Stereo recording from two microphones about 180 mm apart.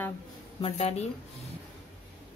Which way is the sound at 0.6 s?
35° left (ahead or behind).